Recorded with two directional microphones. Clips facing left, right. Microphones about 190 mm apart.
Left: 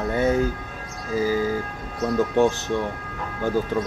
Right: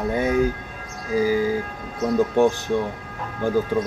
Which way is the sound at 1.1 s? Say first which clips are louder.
Right 2 dB; 15° right (ahead or behind).